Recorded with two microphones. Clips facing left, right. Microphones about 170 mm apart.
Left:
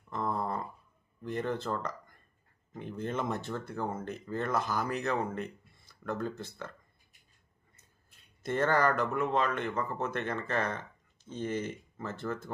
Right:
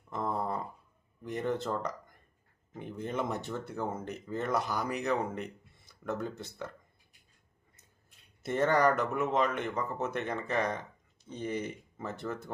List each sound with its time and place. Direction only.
0.1 s a sound: 15° right (ahead or behind)
1.2 s speech: 20° right (ahead or behind)
8.4 s speech: 15° right (ahead or behind)